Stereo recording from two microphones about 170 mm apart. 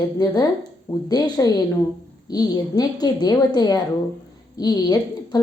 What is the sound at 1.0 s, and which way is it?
A woman's voice, 20° left (ahead or behind).